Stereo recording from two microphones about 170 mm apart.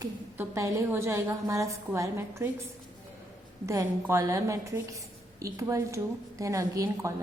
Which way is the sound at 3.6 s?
20° right (ahead or behind).